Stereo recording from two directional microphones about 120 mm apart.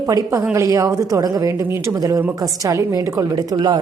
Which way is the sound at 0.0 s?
30° right (ahead or behind).